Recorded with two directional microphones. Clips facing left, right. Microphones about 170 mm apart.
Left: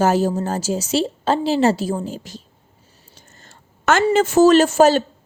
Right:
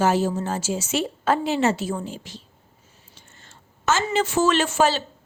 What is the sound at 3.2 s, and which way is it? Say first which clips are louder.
Whispering: left 3 dB; 40° left (ahead or behind).